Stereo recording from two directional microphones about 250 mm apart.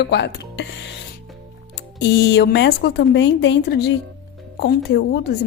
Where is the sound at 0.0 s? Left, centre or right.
Left.